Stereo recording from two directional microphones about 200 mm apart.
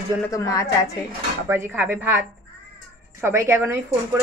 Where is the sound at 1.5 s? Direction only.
10° right (ahead or behind).